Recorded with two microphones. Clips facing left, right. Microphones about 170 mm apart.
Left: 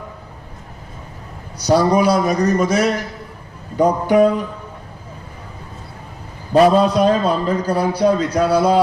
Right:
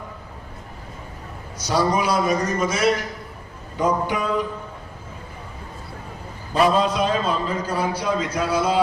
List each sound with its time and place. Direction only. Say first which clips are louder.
1.6 s a man's voice: left 7 dB; 40° left (ahead or behind)
6.5 s a man's voice: left 7 dB; 40° left (ahead or behind)